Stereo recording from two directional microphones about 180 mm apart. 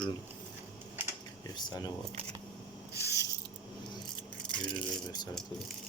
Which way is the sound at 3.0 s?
15° right (ahead or behind).